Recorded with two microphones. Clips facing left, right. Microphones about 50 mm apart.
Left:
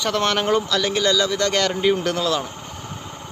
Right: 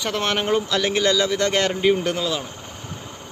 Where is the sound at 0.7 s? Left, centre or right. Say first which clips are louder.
Even; right.